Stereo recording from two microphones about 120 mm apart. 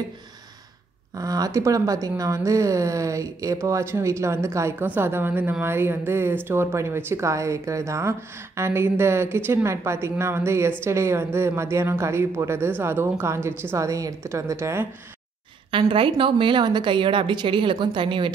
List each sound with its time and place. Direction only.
1.1 s speech: 30° right (ahead or behind)
15.7 s a woman's voice: 45° right (ahead or behind)